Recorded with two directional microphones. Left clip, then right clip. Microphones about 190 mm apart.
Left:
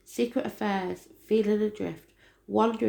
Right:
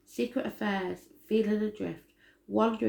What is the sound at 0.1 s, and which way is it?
Speech, 40° left (ahead or behind).